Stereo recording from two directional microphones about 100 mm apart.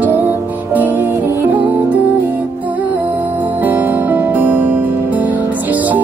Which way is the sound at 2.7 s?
15° right (ahead or behind).